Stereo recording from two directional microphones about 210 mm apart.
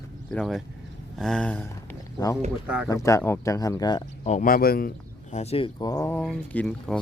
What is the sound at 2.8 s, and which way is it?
Speech, 15° left (ahead or behind).